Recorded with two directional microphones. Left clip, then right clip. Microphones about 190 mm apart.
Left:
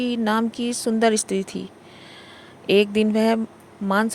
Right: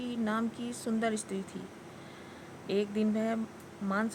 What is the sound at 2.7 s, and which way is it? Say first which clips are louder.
Speech: left 14 dB; 45° left (ahead or behind).